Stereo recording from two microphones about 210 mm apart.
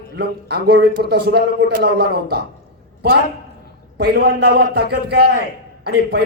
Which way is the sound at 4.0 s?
50° right (ahead or behind).